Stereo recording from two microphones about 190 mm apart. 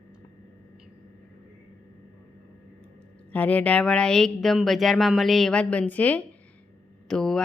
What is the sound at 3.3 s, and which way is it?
Speech, 10° left (ahead or behind).